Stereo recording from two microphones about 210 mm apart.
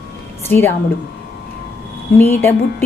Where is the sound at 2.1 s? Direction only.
10° left (ahead or behind).